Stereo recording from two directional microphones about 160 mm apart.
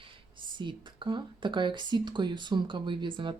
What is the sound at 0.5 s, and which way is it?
Speech, 30° right (ahead or behind).